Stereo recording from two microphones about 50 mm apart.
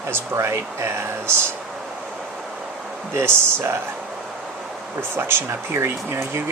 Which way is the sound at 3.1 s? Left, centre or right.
Right.